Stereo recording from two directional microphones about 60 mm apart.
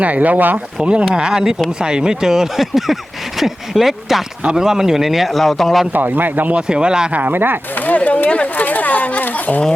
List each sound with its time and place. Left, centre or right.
0.0 s speech: right
0.8 s speech: centre
5.9 s a man's voice: right
6.6 s speech: centre
7.1 s a man's voice: right
7.8 s speech: left